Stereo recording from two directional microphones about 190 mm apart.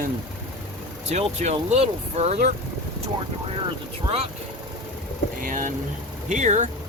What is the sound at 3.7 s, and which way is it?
Speech, 30° right (ahead or behind).